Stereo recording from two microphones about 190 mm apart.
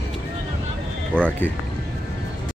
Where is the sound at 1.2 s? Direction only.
10° left (ahead or behind).